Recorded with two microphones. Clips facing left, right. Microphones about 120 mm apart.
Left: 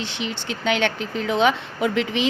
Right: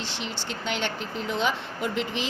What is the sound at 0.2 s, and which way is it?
A woman's voice, 65° left (ahead or behind).